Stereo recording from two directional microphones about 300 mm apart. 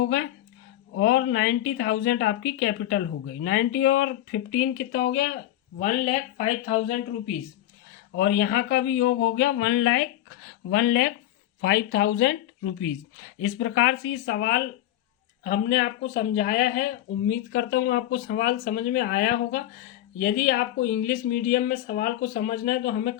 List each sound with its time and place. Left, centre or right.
0.9 s speech: left
5.8 s speech: left
8.1 s speech: left